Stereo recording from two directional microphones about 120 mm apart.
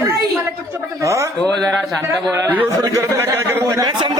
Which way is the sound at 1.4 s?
Centre (ahead or behind).